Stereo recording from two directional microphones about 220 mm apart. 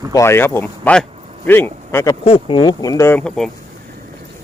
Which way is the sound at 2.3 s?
25° left (ahead or behind).